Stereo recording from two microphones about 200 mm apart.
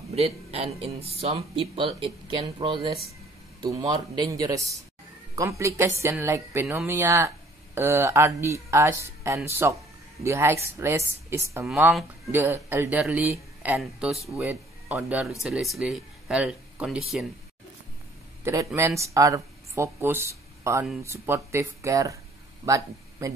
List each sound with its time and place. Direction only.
0.1 s speech: 30° right (ahead or behind); by 17.0 s 5° right (ahead or behind)
18.4 s a man's voice: 15° right (ahead or behind)